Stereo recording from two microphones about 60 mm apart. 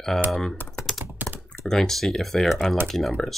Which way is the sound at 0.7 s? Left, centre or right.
Centre.